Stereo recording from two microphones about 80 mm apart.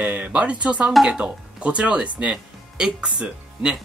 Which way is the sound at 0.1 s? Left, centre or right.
Centre.